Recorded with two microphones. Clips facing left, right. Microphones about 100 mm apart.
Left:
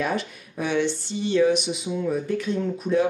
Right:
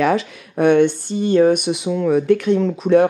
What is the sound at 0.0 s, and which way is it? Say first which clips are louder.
Speech: right 9 dB; 90° right.